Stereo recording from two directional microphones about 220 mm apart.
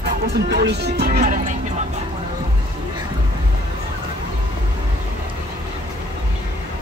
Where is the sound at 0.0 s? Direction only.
50° right (ahead or behind).